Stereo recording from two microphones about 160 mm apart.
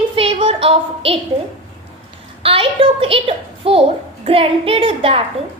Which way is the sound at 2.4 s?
35° right (ahead or behind).